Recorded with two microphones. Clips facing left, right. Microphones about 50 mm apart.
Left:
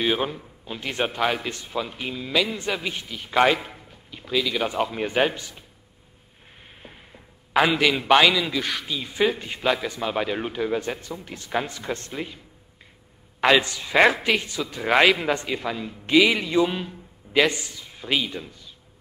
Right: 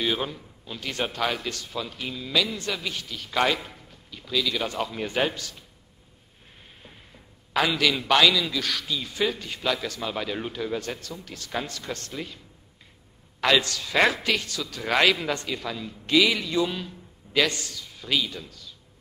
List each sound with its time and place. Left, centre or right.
0.0 s a man's voice: left
6.6 s a man's voice: left
13.4 s a man's voice: left